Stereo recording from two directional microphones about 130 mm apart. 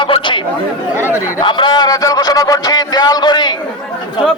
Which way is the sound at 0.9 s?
20° left (ahead or behind).